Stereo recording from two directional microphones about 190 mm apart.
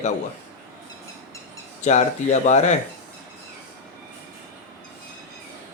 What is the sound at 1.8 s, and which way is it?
Speech, 40° left (ahead or behind).